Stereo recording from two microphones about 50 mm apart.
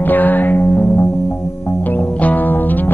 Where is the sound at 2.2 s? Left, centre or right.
Left.